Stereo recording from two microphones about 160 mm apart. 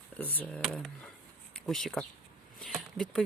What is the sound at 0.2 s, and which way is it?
Speech, 10° left (ahead or behind).